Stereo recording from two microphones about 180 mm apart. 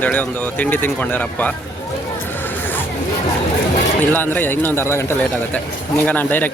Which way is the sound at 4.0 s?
10° left (ahead or behind).